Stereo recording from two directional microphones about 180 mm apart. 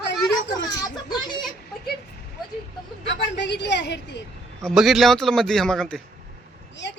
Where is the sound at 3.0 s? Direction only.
75° left (ahead or behind).